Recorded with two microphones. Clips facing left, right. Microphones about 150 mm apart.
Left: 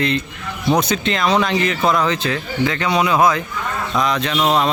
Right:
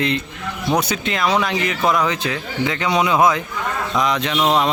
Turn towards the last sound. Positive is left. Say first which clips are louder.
# even
turn(degrees=-20)  # may be behind; listen again after turning